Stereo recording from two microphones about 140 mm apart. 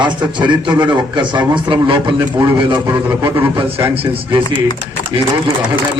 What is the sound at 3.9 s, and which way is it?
Speech, 40° right (ahead or behind).